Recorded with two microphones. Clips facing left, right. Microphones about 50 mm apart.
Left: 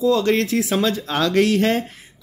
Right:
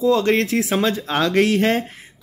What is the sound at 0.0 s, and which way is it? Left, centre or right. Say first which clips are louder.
A man's voice: right 1 dB; right.